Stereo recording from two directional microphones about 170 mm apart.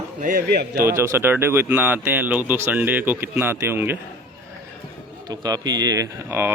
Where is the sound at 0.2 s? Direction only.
55° right (ahead or behind).